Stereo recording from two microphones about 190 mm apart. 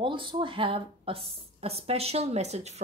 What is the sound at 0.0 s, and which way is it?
A woman's voice, 25° right (ahead or behind).